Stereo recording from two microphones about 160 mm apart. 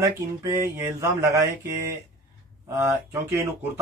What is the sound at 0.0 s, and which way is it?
Mantra, 20° right (ahead or behind).